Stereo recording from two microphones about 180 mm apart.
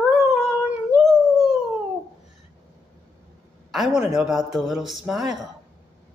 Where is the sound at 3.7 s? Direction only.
Centre (ahead or behind).